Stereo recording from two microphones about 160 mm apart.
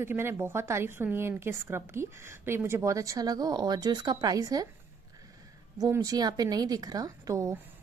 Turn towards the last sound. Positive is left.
turn(degrees=-20)  # may be behind; listen again after turning